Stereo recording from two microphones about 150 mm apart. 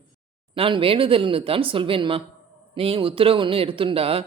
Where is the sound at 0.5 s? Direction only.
35° right (ahead or behind).